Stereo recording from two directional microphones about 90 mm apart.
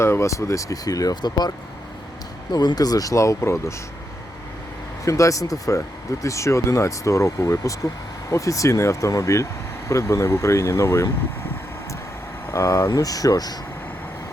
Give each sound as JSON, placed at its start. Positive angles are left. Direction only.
{"t": 0.0, "sound": "speech", "side_deg": 30}
{"t": 5.0, "sound": "speech", "side_deg": 35}
{"t": 12.5, "sound": "speech", "side_deg": 30}
{"t": 12.9, "sound": "speech", "side_deg": 40}